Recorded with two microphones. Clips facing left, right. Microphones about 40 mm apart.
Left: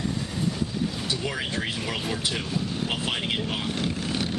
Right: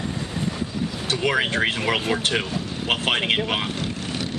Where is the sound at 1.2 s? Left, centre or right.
Right.